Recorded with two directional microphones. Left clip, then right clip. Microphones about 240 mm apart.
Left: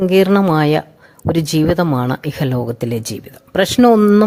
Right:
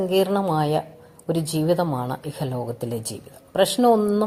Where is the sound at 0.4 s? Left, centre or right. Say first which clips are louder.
Left 7 dB; left.